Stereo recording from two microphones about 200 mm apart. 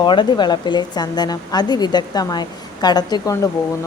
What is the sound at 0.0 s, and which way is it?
A woman's voice, 25° left (ahead or behind).